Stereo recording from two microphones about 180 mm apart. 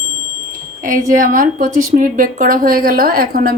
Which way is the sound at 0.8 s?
45° right (ahead or behind).